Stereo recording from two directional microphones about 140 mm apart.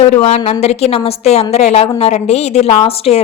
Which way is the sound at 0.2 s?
45° left (ahead or behind).